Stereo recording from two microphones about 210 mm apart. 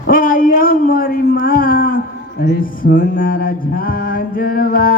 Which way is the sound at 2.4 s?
45° left (ahead or behind).